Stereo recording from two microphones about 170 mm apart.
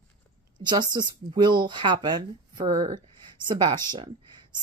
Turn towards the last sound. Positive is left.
turn(degrees=-25)  # may be behind; listen again after turning